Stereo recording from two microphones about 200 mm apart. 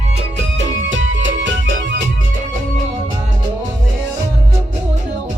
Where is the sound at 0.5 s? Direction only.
65° right (ahead or behind).